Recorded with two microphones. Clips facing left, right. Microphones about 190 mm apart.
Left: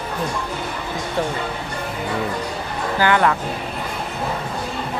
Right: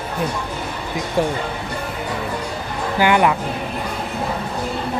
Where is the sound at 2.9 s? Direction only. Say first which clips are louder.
Right 2 dB; 15° right (ahead or behind).